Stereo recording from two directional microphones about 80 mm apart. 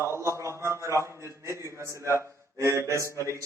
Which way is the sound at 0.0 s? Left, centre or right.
Right.